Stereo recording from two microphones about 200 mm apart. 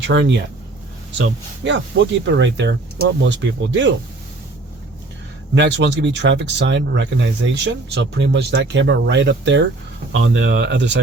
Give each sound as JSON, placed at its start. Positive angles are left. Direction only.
{"t": 0.0, "sound": "speech", "side_deg": -65}
{"t": 5.5, "sound": "speech", "side_deg": -60}